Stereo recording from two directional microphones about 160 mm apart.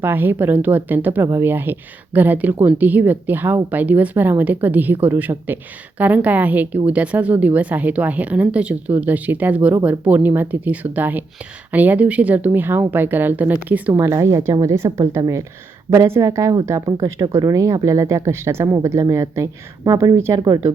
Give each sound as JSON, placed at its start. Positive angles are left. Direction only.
{"t": 0.0, "sound": "a woman's voice", "side_deg": -10}